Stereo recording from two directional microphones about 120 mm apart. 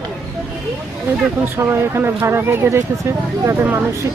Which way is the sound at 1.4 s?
20° right (ahead or behind).